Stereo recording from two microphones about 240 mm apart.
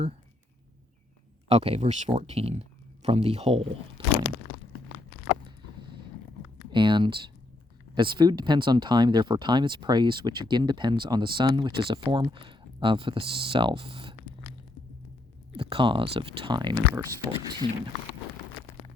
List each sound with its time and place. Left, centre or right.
1.5 s speech: right
6.7 s speech: centre
15.5 s speech: right